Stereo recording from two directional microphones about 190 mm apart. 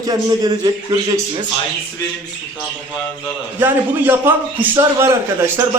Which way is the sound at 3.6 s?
10° right (ahead or behind).